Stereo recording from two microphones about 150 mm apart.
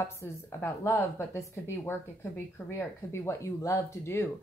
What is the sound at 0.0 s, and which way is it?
A woman's voice, 20° left (ahead or behind).